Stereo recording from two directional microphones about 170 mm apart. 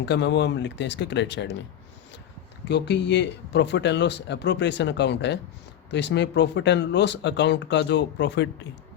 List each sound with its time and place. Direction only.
0.0 s speech: 90° left
2.6 s speech: 85° left